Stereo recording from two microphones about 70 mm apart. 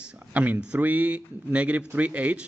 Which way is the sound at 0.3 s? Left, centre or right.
Right.